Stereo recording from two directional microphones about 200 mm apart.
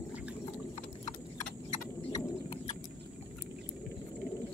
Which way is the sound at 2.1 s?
20° left (ahead or behind).